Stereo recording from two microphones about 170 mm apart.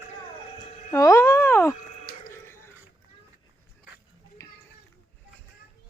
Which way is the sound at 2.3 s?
15° left (ahead or behind).